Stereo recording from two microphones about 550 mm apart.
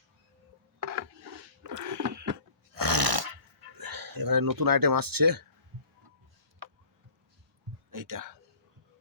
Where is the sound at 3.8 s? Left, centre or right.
Right.